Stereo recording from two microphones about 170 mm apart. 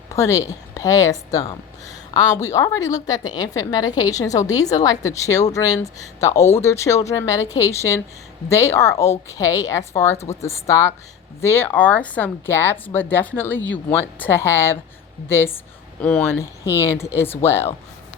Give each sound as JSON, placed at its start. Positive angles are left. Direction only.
{"t": 0.1, "sound": "a woman's voice", "side_deg": 20}